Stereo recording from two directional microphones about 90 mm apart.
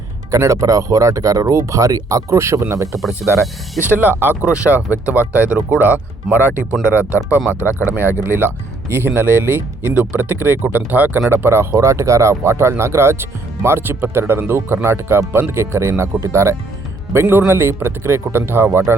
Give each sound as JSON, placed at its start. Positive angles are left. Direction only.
{"t": 0.3, "sound": "speech", "side_deg": -35}
{"t": 3.0, "sound": "speech", "side_deg": 0}
{"t": 3.9, "sound": "speech", "side_deg": -20}
{"t": 4.4, "sound": "speech", "side_deg": -10}
{"t": 6.3, "sound": "speech", "side_deg": 0}
{"t": 6.8, "sound": "speech", "side_deg": -15}
{"t": 7.1, "sound": "speech", "side_deg": 30}
{"t": 7.9, "sound": "speech", "side_deg": -20}